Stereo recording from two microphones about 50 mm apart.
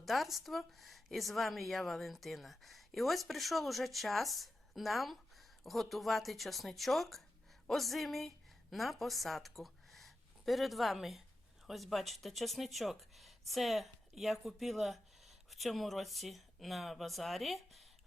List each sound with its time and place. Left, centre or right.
0.0 s a woman's voice: centre